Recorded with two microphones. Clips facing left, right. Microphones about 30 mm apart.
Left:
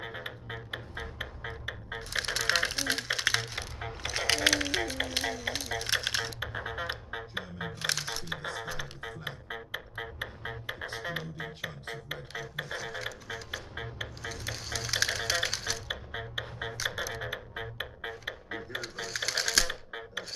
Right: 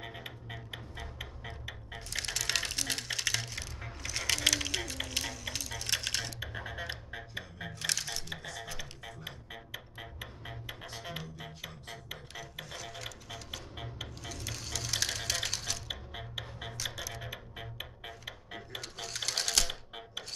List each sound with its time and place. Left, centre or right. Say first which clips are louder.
0.0 s music: left 5 dB; centre
3.5 s a sound: left 5 dB; left
4.4 s music: left 4 dB; centre
8.4 s music: left 6 dB; left
8.6 s music: left 5 dB; centre
12.1 s didgeridoo: left 6 dB; centre
13.3 s music: left 5 dB; centre
18.8 s typing: left 3 dB; centre